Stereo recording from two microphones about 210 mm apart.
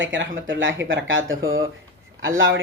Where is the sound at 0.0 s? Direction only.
60° right (ahead or behind).